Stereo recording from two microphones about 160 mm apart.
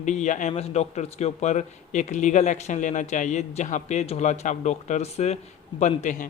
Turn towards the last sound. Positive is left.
turn(degrees=50)  # may be behind; listen again after turning